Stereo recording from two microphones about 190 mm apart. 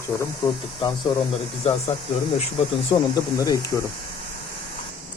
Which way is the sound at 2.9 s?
20° left (ahead or behind).